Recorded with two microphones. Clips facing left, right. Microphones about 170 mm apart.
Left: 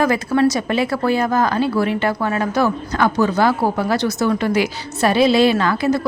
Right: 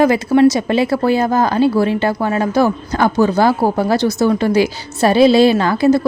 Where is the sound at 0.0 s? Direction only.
25° right (ahead or behind).